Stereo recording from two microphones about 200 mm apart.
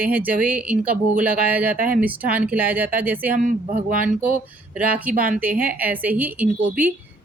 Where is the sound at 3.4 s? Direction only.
45° right (ahead or behind).